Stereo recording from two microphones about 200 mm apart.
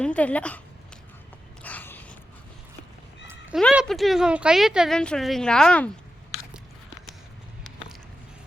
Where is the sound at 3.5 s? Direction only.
5° right (ahead or behind).